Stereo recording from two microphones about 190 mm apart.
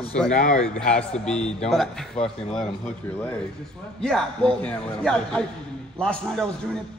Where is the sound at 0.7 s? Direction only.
5° left (ahead or behind).